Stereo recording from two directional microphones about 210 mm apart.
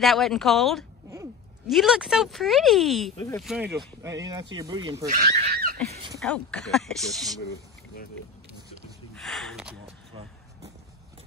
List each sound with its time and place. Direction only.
0.0 s speech: centre (ahead or behind)
4.0 s speech: 15° right (ahead or behind)
5.0 s speech: 35° right (ahead or behind)
5.5 s a sound: 50° right (ahead or behind)
6.1 s speech: 5° left (ahead or behind)
9.1 s speech: centre (ahead or behind)
10.1 s a sound: 25° right (ahead or behind)